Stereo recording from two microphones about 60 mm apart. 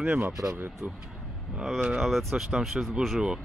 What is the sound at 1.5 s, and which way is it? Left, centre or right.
Speech, centre.